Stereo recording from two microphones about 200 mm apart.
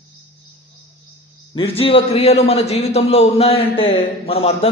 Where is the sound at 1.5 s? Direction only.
30° left (ahead or behind).